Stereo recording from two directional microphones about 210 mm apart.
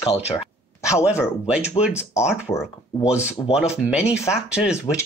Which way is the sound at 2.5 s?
20° left (ahead or behind).